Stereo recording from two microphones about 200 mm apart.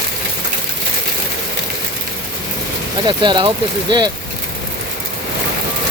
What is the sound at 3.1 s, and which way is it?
Speech, 20° right (ahead or behind).